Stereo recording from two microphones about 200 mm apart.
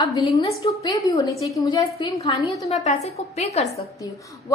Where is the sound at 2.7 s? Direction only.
35° left (ahead or behind).